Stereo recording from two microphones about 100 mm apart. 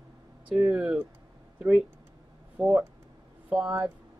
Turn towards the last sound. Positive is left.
turn(degrees=-10)  # may be behind; listen again after turning